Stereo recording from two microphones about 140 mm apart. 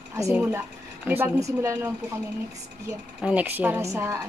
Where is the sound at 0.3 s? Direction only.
10° right (ahead or behind).